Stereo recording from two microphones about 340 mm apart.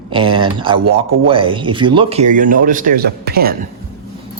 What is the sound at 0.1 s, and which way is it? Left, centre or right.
Speech, centre.